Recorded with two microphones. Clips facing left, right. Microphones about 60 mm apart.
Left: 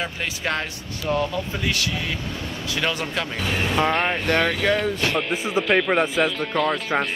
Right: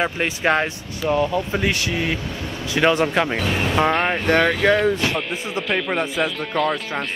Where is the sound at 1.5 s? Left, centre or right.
Right.